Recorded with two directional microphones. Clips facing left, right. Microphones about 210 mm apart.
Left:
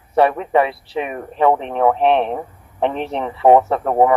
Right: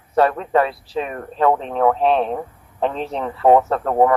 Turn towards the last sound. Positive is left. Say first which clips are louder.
# left 1 dB
turn(degrees=15)  # may be behind; listen again after turning